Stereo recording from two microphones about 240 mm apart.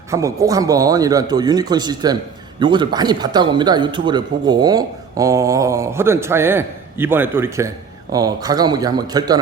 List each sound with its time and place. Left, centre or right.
0.1 s a man's voice: centre